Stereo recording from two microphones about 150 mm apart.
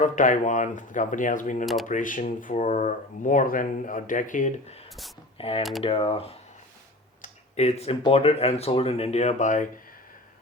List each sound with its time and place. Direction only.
0.0 s speech: 60° left (ahead or behind)
1.6 s speech: centre (ahead or behind)
1.9 s speech: 60° left (ahead or behind)